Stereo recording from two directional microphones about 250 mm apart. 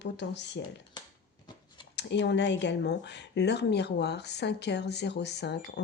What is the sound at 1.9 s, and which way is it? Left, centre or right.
A woman's voice, left.